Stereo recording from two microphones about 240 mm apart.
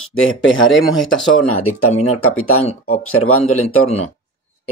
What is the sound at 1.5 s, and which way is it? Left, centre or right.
Speech, left.